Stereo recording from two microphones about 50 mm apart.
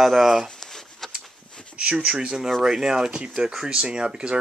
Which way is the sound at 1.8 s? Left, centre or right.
Right.